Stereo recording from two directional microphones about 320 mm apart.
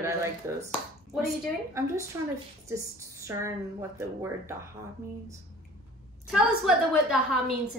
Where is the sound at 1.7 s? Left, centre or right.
Centre.